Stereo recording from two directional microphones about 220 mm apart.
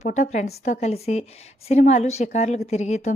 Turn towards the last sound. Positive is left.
turn(degrees=30)  # may be behind; listen again after turning